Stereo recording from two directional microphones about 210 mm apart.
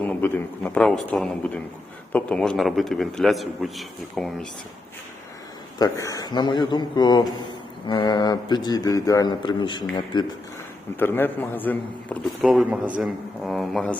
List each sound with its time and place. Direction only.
0.2 s a man's voice: 5° left (ahead or behind)
5.8 s a man's voice: 15° left (ahead or behind)
11.0 s a man's voice: 10° left (ahead or behind)